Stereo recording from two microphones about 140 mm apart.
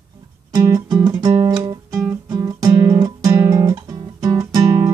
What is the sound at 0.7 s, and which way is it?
Music, 30° right (ahead or behind).